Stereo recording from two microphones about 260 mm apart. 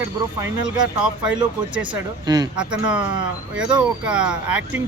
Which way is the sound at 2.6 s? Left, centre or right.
Centre.